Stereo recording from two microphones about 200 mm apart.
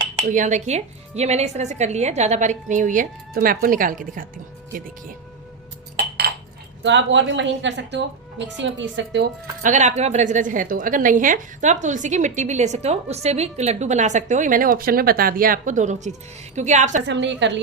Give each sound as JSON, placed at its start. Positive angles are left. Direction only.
{"t": 0.3, "sound": "a woman's voice", "side_deg": -40}
{"t": 6.8, "sound": "speech", "side_deg": -65}
{"t": 9.6, "sound": "a woman's voice", "side_deg": -35}
{"t": 17.1, "sound": "speech", "side_deg": -65}